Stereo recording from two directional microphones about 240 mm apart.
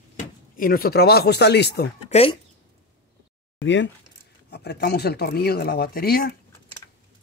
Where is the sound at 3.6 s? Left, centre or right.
Left.